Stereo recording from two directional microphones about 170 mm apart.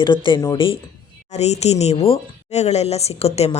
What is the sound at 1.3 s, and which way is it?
Speech, 40° left (ahead or behind).